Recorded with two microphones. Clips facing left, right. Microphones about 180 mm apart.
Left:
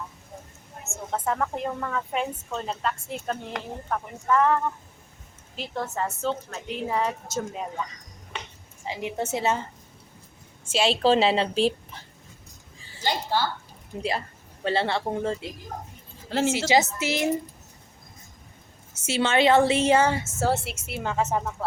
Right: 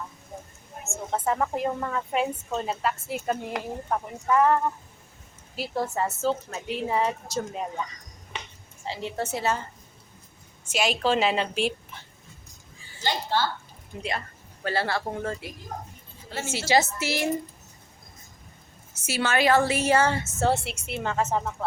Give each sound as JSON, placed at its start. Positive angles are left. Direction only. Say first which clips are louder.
{"t": 0.9, "sound": "a woman's voice", "louder": "right 1 dB", "side_deg": -5}
{"t": 8.8, "sound": "a woman's voice", "louder": "left 1 dB", "side_deg": 15}
{"t": 10.7, "sound": "a woman's voice", "louder": "left 4 dB", "side_deg": 30}
{"t": 13.0, "sound": "a sound", "louder": "even", "side_deg": 15}
{"t": 14.6, "sound": "a woman's voice", "louder": "left 2 dB", "side_deg": 25}
{"t": 16.6, "sound": "a woman's voice", "louder": "left 1 dB", "side_deg": 20}
{"t": 19.0, "sound": "a woman's voice", "louder": "left 2 dB", "side_deg": 25}